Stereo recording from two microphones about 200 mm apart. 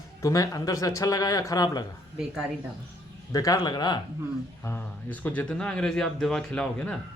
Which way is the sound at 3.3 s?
15° left (ahead or behind).